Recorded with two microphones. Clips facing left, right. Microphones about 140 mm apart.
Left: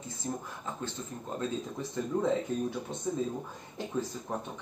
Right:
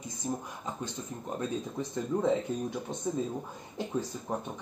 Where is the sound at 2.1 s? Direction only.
10° right (ahead or behind).